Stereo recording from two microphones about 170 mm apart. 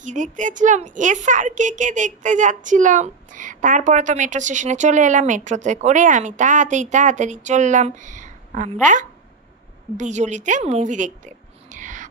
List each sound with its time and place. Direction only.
0.0 s a woman's voice: 50° right (ahead or behind)
9.9 s a woman's voice: 45° right (ahead or behind)